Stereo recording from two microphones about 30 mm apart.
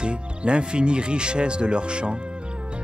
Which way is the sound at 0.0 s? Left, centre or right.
Right.